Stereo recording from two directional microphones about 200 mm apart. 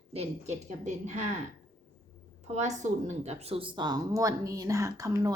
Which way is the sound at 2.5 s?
35° right (ahead or behind).